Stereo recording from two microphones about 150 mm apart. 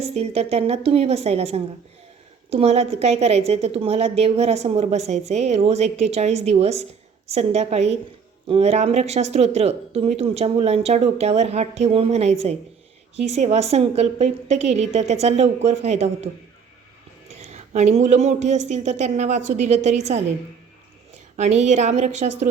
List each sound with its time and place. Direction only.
0.0 s a woman's voice: 45° right (ahead or behind)
17.3 s a woman's voice: 50° right (ahead or behind)
21.3 s a woman's voice: 50° right (ahead or behind)